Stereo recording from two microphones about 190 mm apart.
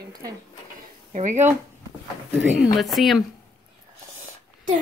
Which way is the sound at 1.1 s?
40° right (ahead or behind).